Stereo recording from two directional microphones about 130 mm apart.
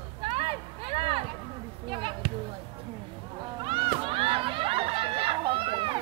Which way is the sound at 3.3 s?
35° right (ahead or behind).